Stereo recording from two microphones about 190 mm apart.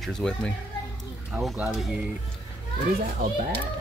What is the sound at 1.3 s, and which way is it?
Speech, 5° right (ahead or behind).